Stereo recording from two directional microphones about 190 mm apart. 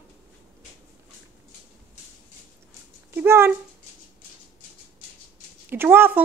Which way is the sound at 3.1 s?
10° right (ahead or behind).